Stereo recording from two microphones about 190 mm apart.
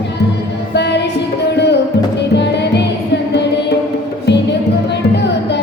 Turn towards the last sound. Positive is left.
turn(degrees=65)  # may be behind; listen again after turning